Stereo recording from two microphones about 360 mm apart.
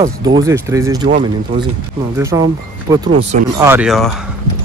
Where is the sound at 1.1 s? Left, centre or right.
Right.